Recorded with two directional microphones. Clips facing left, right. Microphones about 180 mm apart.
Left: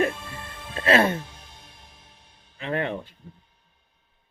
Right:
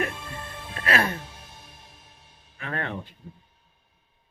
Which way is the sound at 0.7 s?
25° left (ahead or behind).